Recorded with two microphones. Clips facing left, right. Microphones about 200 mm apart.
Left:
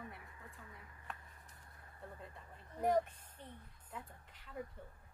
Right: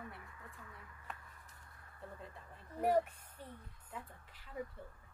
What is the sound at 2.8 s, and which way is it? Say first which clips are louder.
Speech: right 1 dB; 10° right (ahead or behind).